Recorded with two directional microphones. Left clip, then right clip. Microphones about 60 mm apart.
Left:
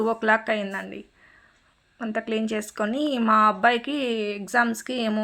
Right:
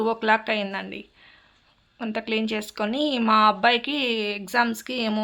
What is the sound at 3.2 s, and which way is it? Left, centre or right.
Speech, centre.